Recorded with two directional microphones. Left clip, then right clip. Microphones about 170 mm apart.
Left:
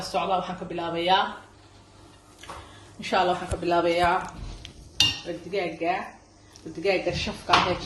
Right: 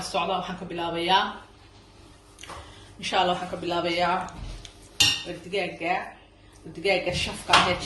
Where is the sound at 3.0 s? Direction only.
45° left (ahead or behind).